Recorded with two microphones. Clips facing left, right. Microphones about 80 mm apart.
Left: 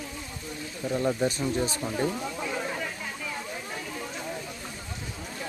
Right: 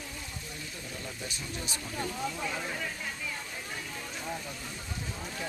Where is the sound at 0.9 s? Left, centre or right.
Left.